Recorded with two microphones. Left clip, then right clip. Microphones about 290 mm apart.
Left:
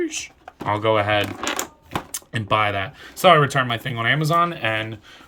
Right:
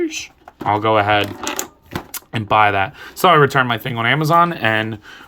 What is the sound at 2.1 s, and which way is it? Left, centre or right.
Speech, centre.